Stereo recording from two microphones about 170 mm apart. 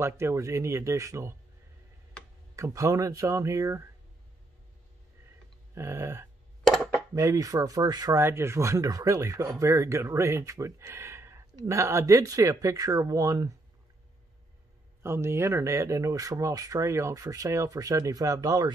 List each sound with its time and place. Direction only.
0.0 s speech: 15° right (ahead or behind)
2.5 s speech: 20° right (ahead or behind)
5.8 s speech: 15° right (ahead or behind)
6.6 s a sound: 5° left (ahead or behind)
7.2 s speech: 20° right (ahead or behind)
15.0 s speech: 15° right (ahead or behind)